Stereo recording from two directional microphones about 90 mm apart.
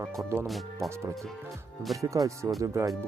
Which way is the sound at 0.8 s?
Centre (ahead or behind).